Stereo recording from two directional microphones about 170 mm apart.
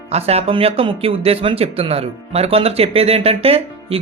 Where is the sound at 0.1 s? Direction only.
40° right (ahead or behind).